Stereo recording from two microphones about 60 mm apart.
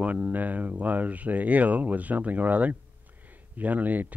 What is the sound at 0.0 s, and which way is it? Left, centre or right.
Speech, right.